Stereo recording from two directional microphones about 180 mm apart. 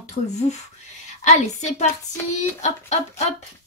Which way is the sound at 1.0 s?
40° left (ahead or behind).